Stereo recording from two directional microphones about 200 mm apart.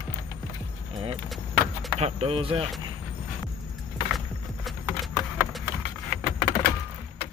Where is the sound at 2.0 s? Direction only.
30° right (ahead or behind).